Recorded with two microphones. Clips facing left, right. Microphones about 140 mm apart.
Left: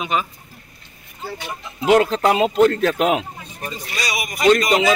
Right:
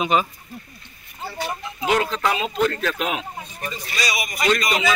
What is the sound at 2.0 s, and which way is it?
Speech, 35° left (ahead or behind).